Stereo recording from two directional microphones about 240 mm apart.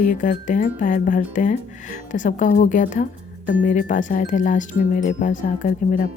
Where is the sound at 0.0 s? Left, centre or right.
Left.